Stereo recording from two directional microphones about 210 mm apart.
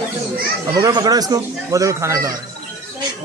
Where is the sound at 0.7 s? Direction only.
15° right (ahead or behind).